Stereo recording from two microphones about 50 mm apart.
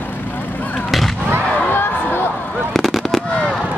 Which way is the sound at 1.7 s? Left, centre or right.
Left.